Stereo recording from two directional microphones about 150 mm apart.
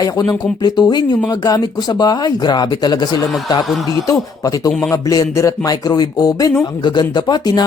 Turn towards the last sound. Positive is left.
turn(degrees=30)  # may be behind; listen again after turning